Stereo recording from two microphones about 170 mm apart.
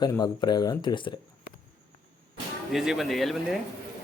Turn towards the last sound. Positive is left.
turn(degrees=0)  # may be behind; listen again after turning